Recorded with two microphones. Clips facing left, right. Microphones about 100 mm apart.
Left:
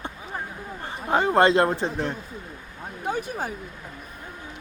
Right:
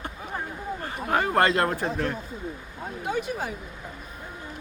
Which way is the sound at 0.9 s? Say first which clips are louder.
Left 3 dB; 20° left (ahead or behind).